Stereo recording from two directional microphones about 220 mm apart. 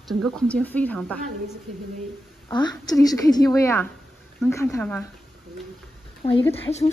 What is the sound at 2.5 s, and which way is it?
A woman's voice, 20° left (ahead or behind).